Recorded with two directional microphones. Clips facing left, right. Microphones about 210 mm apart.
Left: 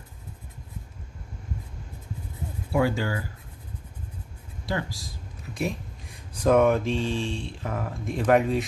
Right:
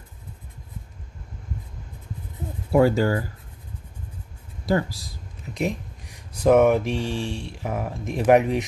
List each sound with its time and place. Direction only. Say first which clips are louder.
2.7 s speech: right 6 dB; 40° right (ahead or behind)
5.5 s speech: right 3 dB; 20° right (ahead or behind)